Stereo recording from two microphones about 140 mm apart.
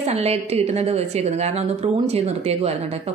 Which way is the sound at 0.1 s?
50° right (ahead or behind).